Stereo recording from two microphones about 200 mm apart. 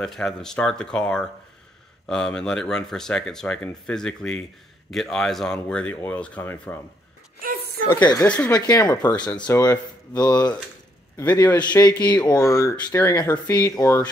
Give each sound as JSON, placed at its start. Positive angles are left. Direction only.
{"t": 0.0, "sound": "speech", "side_deg": 5}
{"t": 7.9, "sound": "speech", "side_deg": 15}
{"t": 8.5, "sound": "speech", "side_deg": 20}